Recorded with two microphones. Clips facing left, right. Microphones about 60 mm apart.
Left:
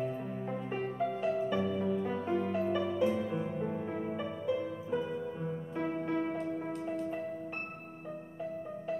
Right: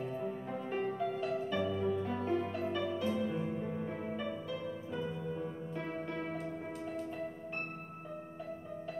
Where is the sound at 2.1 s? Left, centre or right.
Left.